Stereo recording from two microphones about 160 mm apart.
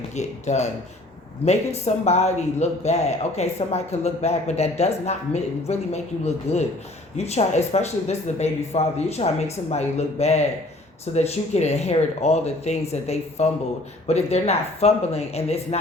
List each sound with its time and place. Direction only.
0.2 s speech: 45° left (ahead or behind)